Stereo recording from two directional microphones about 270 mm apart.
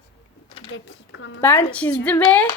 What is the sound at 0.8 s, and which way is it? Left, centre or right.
Speech, left.